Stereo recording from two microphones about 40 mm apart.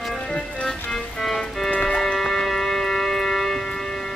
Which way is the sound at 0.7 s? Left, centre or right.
Centre.